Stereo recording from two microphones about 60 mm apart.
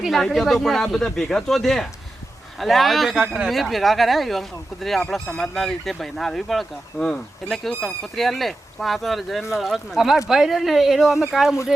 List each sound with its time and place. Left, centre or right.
0.1 s speech: centre
7.0 s speech: centre
7.5 s speech: centre